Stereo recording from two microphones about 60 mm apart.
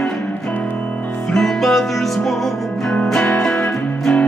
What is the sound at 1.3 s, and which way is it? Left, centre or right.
Music, centre.